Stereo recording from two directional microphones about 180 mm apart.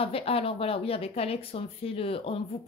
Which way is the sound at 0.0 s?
30° left (ahead or behind).